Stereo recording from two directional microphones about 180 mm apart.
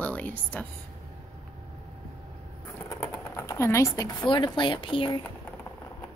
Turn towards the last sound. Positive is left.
turn(degrees=25)  # may be behind; listen again after turning